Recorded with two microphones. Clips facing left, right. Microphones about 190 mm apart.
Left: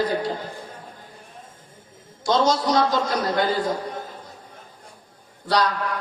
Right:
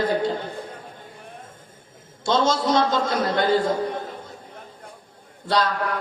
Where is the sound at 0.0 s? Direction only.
25° right (ahead or behind).